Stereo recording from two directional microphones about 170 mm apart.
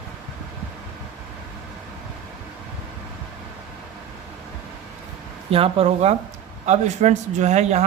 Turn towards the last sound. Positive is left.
turn(degrees=-40)  # may be behind; listen again after turning